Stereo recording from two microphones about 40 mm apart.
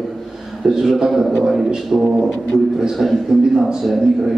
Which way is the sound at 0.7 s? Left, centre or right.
Centre.